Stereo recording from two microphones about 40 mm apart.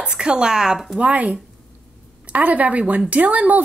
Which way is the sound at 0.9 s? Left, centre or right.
Right.